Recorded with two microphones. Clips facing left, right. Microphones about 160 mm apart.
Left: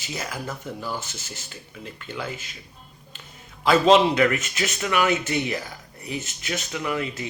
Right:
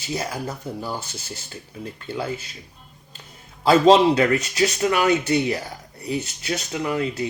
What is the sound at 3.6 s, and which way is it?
Speech, 35° right (ahead or behind).